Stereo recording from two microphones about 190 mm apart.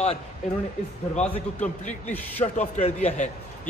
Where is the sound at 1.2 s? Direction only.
35° left (ahead or behind).